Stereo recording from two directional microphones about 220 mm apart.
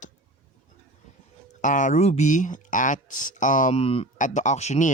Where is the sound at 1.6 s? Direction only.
35° left (ahead or behind).